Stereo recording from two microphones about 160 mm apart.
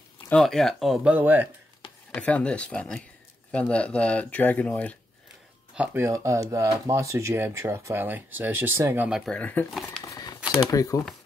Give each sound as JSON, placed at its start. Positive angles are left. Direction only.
{"t": 0.3, "sound": "speech", "side_deg": 5}
{"t": 2.1, "sound": "speech", "side_deg": 5}
{"t": 5.8, "sound": "speech", "side_deg": -15}
{"t": 9.2, "sound": "speech", "side_deg": 5}
{"t": 10.0, "sound": "a sound", "side_deg": 25}
{"t": 10.6, "sound": "speech", "side_deg": 20}